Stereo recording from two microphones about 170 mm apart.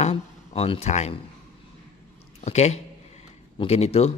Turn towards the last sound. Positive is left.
turn(degrees=40)  # may be behind; listen again after turning